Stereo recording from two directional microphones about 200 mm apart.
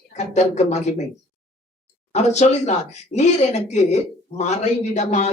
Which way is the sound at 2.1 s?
35° left (ahead or behind).